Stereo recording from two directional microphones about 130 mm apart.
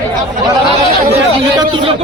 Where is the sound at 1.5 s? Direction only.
40° right (ahead or behind).